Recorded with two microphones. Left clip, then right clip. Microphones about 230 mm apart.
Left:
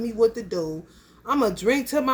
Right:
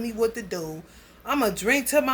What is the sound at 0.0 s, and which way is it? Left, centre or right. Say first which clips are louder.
A woman's voice: left 4 dB; centre.